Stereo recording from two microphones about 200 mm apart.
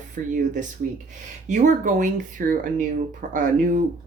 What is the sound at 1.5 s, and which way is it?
Speech, 40° right (ahead or behind).